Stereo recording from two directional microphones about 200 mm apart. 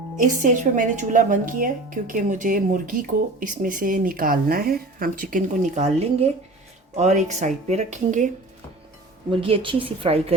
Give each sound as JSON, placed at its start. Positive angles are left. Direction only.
{"t": 0.2, "sound": "a woman's voice", "side_deg": -40}
{"t": 9.3, "sound": "a woman's voice", "side_deg": -25}